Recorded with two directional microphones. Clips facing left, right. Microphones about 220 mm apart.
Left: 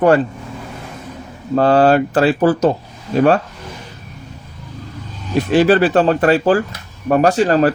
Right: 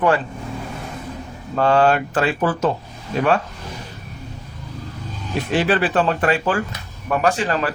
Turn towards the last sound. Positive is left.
turn(degrees=40)  # may be behind; listen again after turning